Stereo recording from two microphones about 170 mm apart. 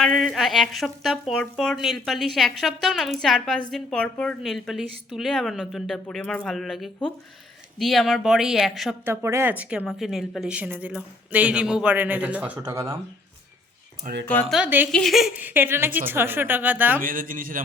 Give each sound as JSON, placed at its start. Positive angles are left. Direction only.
{"t": 0.0, "sound": "speech", "side_deg": 0}
{"t": 9.0, "sound": "speech", "side_deg": -15}
{"t": 14.0, "sound": "speech", "side_deg": -50}
{"t": 14.5, "sound": "speech", "side_deg": -10}
{"t": 17.0, "sound": "a man's voice", "side_deg": -55}